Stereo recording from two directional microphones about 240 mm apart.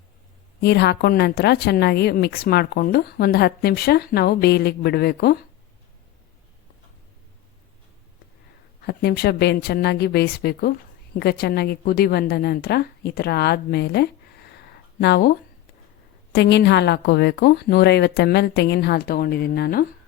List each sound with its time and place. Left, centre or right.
0.6 s a woman's voice: left
8.9 s a woman's voice: left
14.5 s a sound: left
16.3 s a woman's voice: left